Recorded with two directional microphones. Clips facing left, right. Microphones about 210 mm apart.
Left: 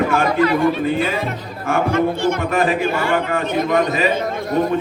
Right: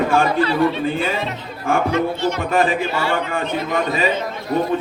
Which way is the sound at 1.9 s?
50° left (ahead or behind).